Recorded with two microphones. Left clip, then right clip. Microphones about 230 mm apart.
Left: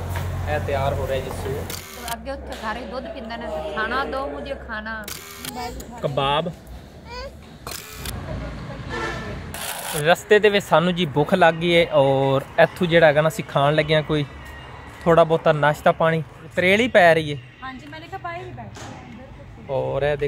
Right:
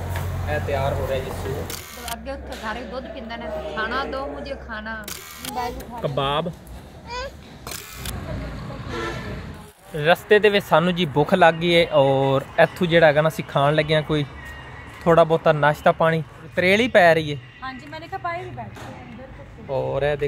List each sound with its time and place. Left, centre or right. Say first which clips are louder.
0.1 s speech: left 1 dB; centre
7.6 s camera: left 1 dB; centre
9.7 s speech: even; centre
19.7 s speech: even; centre